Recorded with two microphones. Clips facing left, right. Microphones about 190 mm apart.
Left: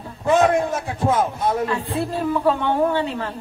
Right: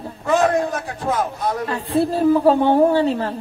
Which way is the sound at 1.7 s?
35° right (ahead or behind).